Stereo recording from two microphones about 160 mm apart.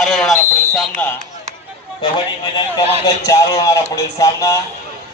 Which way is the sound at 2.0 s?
30° left (ahead or behind).